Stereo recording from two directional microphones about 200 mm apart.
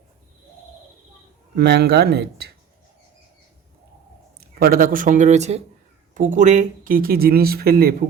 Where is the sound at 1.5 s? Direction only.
55° right (ahead or behind).